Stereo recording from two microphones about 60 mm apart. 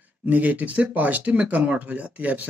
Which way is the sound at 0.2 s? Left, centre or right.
Right.